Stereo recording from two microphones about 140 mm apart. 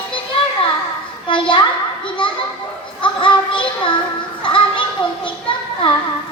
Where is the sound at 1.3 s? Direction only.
35° left (ahead or behind).